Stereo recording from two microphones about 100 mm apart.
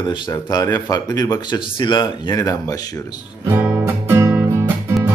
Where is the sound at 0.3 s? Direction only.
40° left (ahead or behind).